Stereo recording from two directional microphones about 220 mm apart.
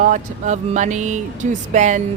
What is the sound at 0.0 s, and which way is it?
Speech, 35° right (ahead or behind).